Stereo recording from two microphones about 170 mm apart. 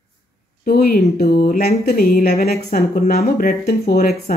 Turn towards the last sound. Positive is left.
turn(degrees=55)  # may be behind; listen again after turning